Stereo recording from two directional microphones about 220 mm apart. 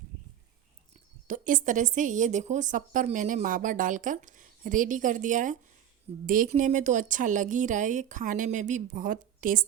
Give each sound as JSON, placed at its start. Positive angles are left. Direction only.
{"t": 1.3, "sound": "a woman's voice", "side_deg": -35}